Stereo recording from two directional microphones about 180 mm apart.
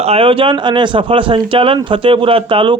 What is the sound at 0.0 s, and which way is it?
A man's voice, 30° right (ahead or behind).